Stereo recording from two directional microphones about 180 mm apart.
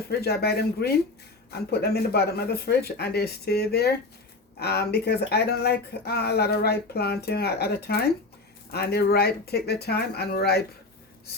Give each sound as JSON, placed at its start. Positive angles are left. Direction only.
{"t": 0.1, "sound": "speech", "side_deg": 60}